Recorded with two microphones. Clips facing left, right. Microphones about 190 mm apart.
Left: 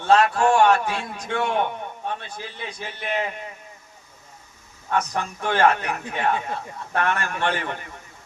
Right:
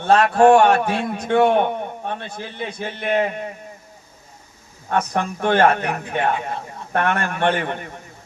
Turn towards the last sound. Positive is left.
turn(degrees=-55)  # may be behind; listen again after turning